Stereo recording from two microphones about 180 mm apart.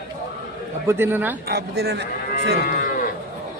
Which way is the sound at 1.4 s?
60° right (ahead or behind).